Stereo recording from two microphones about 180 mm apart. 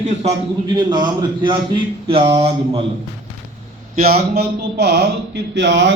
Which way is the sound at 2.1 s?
30° right (ahead or behind).